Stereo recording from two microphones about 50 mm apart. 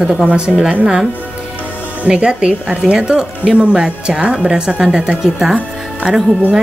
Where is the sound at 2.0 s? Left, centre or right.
Centre.